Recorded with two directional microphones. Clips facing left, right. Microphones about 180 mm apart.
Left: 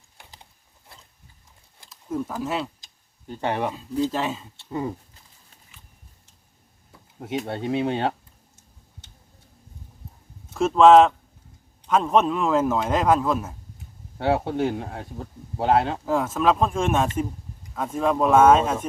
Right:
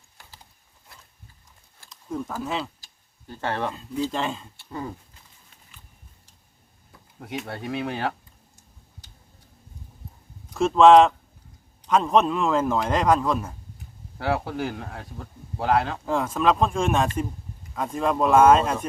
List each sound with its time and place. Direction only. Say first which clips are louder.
1.9 s a sound: left 3 dB; 5° left (ahead or behind)
2.4 s speech: left 1 dB; 5° left (ahead or behind)
2.8 s tick: left 4 dB; 20° left (ahead or behind)
3.7 s speech: left 3 dB; 5° left (ahead or behind)
4.5 s speech: left 5 dB; 20° left (ahead or behind)
7.2 s speech: left 5 dB; 25° left (ahead or behind)
9.0 s tick-tock: even; 25° left (ahead or behind)
10.5 s speech: even; centre (ahead or behind)
13.7 s speech: left 3 dB; 25° left (ahead or behind)
16.0 s speech: left 1 dB; 5° left (ahead or behind)